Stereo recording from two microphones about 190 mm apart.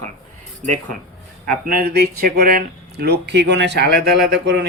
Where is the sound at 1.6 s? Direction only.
55° right (ahead or behind).